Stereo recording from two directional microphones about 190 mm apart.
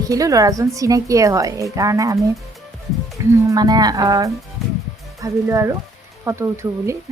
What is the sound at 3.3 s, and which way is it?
Speech, 20° right (ahead or behind).